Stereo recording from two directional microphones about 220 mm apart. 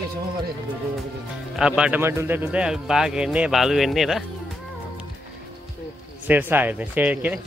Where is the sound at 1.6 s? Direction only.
5° right (ahead or behind).